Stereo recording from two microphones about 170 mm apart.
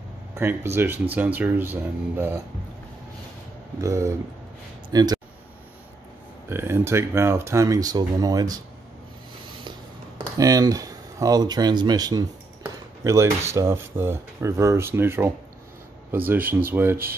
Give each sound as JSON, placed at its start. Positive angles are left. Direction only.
{"t": 0.3, "sound": "speech", "side_deg": -15}
{"t": 3.8, "sound": "speech", "side_deg": -20}
{"t": 6.5, "sound": "speech", "side_deg": -15}
{"t": 9.7, "sound": "a sound", "side_deg": -25}
{"t": 13.6, "sound": "speech", "side_deg": -15}